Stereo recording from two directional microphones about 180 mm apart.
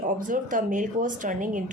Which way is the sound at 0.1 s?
45° right (ahead or behind).